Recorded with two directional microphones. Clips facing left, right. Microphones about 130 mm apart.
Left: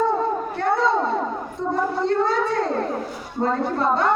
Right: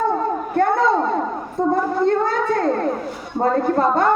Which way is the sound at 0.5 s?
50° right (ahead or behind).